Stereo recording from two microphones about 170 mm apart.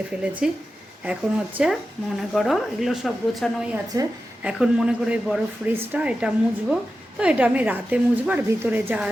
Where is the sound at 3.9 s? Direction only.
20° right (ahead or behind).